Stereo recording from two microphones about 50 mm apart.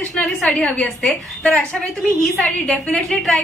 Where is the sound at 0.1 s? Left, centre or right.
Centre.